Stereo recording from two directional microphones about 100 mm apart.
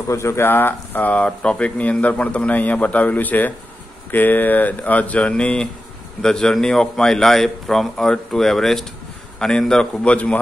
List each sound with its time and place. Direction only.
0.1 s a man's voice: 30° left (ahead or behind)